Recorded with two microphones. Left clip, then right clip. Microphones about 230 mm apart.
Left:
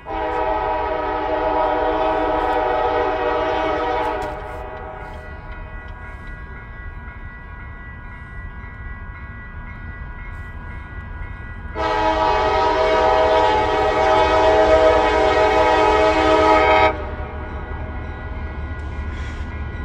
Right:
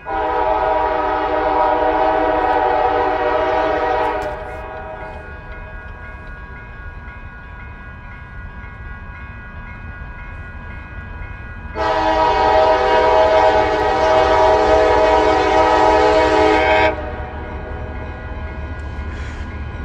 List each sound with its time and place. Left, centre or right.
0.1 s train: left
11.7 s train: left
16.5 s train: right